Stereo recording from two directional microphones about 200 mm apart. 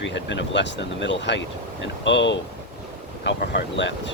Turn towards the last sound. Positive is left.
turn(degrees=65)  # may be behind; listen again after turning